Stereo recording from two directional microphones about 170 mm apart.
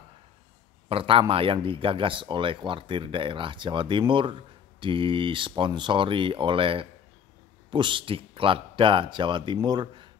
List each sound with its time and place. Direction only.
0.8 s speech: 30° right (ahead or behind)